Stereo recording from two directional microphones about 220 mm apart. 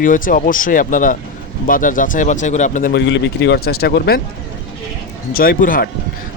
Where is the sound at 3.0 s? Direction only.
55° left (ahead or behind).